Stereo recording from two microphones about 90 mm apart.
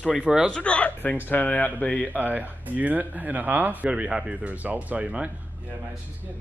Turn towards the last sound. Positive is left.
turn(degrees=-15)  # may be behind; listen again after turning